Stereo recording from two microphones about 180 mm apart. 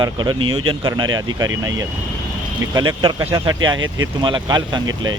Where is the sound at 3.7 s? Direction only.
90° right.